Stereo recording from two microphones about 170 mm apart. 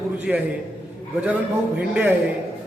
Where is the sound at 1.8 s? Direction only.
10° right (ahead or behind).